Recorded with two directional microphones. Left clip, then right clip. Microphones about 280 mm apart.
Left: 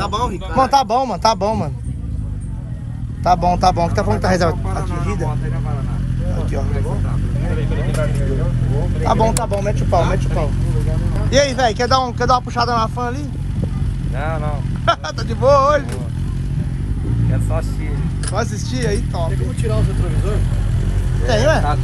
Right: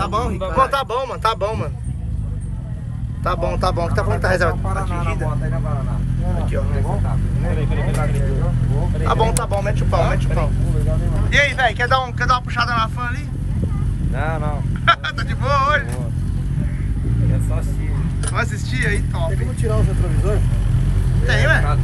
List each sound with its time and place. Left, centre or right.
0.0 s a sound: right
0.6 s speech: centre
3.3 s speech: left
9.0 s speech: centre
11.3 s speech: centre
14.2 s speech: centre
14.9 s speech: centre
18.3 s speech: centre
21.3 s speech: centre